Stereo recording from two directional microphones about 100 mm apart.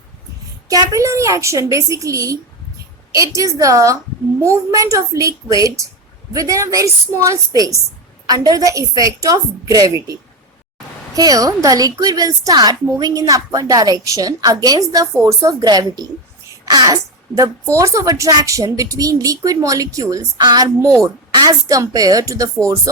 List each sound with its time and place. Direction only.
0.7 s a woman's voice: 35° right (ahead or behind)